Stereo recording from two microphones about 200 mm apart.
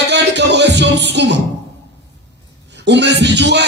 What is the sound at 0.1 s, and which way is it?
Music, 60° right (ahead or behind).